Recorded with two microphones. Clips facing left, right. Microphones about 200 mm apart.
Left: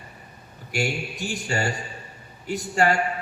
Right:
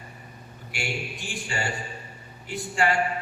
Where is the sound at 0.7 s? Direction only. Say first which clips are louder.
Left 6 dB; 40° left (ahead or behind).